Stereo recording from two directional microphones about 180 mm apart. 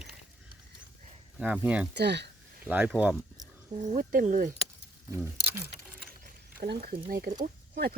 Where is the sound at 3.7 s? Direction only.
40° right (ahead or behind).